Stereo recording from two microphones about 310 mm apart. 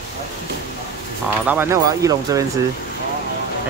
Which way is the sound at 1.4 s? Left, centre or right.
Centre.